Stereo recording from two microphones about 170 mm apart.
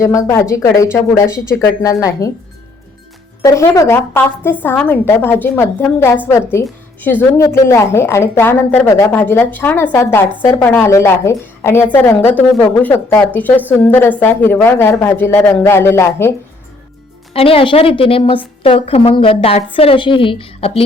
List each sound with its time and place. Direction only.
0.0 s a woman's voice: 15° left (ahead or behind)
3.4 s a woman's voice: 20° left (ahead or behind)
17.3 s a woman's voice: 35° left (ahead or behind)